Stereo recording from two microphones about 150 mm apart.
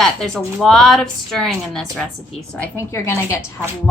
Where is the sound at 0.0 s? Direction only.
5° left (ahead or behind).